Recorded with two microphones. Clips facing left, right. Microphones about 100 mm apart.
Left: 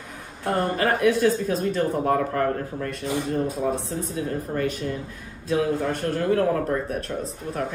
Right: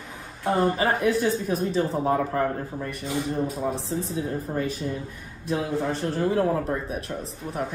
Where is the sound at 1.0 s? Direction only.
85° left.